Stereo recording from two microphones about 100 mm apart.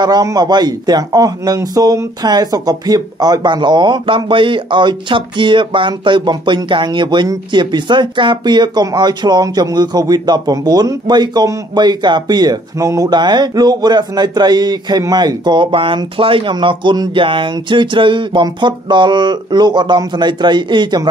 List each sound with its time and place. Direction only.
0.0 s speech: 40° right (ahead or behind)